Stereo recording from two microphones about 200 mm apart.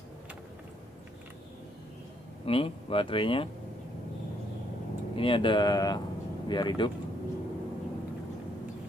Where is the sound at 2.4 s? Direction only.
30° left (ahead or behind).